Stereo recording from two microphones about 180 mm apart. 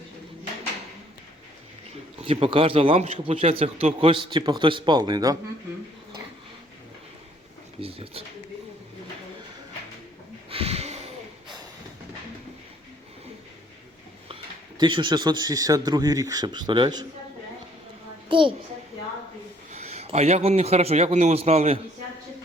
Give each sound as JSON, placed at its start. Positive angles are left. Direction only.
{"t": 2.2, "sound": "a man's voice", "side_deg": -30}
{"t": 7.8, "sound": "a man's voice", "side_deg": -30}
{"t": 10.5, "sound": "a sound", "side_deg": -35}
{"t": 14.8, "sound": "a man's voice", "side_deg": -25}
{"t": 18.3, "sound": "a child's voice", "side_deg": -30}
{"t": 19.8, "sound": "a man's voice", "side_deg": -35}